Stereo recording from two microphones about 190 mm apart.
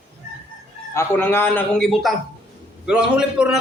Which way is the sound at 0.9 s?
15° left (ahead or behind).